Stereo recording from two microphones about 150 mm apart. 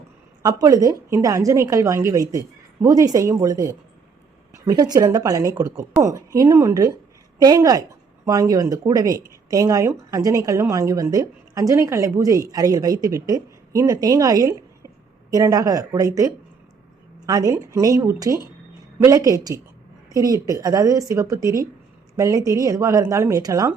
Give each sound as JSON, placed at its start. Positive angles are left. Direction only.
{"t": 0.4, "sound": "a woman's voice", "side_deg": -25}